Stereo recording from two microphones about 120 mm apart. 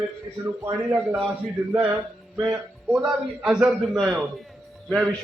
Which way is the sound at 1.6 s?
15° right (ahead or behind).